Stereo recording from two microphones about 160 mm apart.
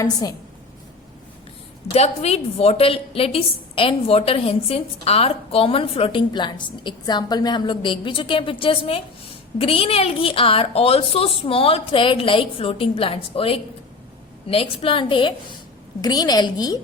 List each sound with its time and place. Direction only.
0.0 s a woman's voice: 25° left (ahead or behind)
1.9 s a woman's voice: 40° left (ahead or behind); by 16.7 s 25° left (ahead or behind)